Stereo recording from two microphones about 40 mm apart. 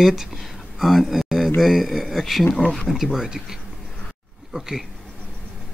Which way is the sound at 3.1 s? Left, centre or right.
Centre.